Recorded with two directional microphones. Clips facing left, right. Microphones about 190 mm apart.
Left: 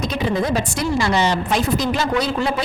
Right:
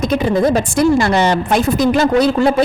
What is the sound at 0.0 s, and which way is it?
A woman's voice, 50° right (ahead or behind).